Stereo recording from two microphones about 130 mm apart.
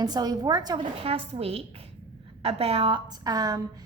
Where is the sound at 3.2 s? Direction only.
30° right (ahead or behind).